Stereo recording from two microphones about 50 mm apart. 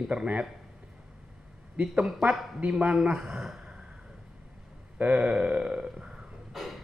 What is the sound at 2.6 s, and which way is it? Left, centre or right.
Speech, right.